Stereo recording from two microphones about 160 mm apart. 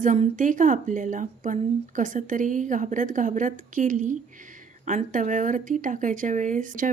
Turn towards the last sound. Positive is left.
turn(degrees=-55)  # may be behind; listen again after turning